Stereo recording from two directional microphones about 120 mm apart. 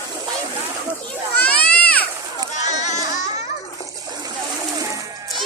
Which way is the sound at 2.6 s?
75° left (ahead or behind).